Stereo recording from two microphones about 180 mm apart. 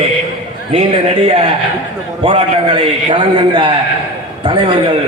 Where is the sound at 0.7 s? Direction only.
35° right (ahead or behind).